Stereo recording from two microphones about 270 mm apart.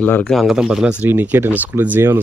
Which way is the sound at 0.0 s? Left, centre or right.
Centre.